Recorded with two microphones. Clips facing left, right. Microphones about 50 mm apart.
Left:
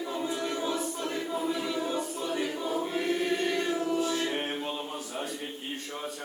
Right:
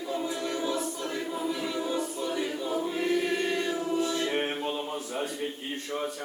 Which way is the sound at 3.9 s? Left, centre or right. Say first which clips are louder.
Right 1 dB; centre.